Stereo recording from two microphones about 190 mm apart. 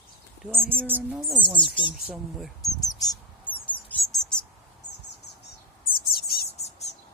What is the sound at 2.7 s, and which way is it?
Bird, 20° left (ahead or behind).